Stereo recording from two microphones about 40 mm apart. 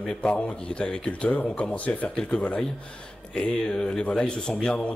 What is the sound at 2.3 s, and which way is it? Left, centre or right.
Speech, left.